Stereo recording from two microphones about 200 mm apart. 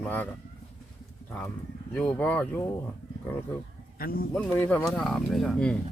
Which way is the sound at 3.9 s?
45° left (ahead or behind).